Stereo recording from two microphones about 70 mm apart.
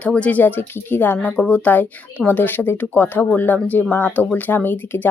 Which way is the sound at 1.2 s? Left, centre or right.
Centre.